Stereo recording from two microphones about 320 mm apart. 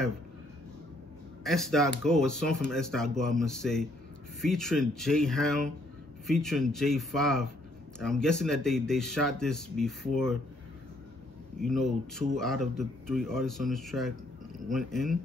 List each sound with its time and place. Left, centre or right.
1.4 s speech: centre
11.6 s speech: centre